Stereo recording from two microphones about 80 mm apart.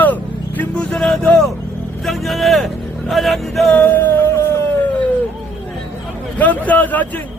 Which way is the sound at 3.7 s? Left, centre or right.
Left.